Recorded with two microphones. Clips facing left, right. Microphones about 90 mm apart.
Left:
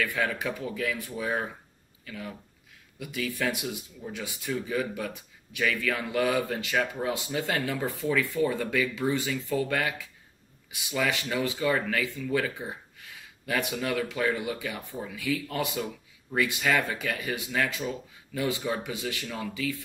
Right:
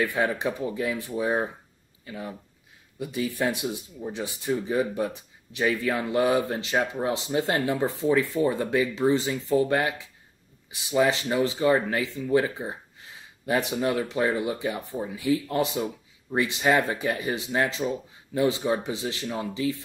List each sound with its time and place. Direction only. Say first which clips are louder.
0.0 s a man's voice: right 4 dB; 25° right (ahead or behind)